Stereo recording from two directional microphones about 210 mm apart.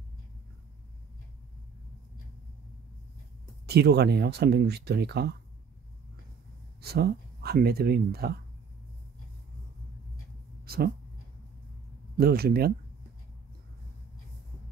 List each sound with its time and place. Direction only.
3.6 s speech: 50° right (ahead or behind)
6.8 s speech: 50° right (ahead or behind)
10.6 s a sound: 50° right (ahead or behind)
12.2 s speech: 50° right (ahead or behind)